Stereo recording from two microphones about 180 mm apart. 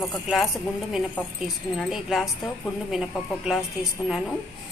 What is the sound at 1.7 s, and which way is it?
A woman's voice, centre (ahead or behind).